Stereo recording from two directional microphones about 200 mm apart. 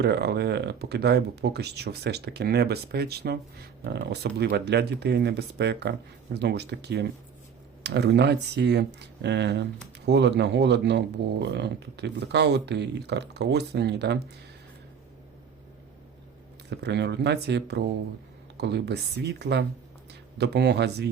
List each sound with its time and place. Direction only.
0.0 s speech: 55° right (ahead or behind)
16.6 s speech: 55° right (ahead or behind)